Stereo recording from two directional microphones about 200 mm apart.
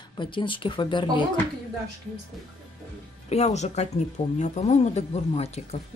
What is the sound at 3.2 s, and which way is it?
Speech, 35° left (ahead or behind).